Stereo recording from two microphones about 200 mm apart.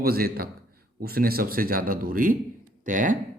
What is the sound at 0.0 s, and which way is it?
A man's voice, 50° right (ahead or behind).